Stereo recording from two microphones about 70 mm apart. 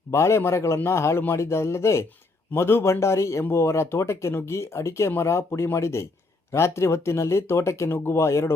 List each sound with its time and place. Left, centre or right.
0.1 s speech: left